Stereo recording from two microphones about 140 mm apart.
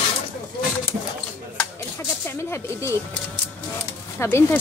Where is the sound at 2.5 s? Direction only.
20° left (ahead or behind).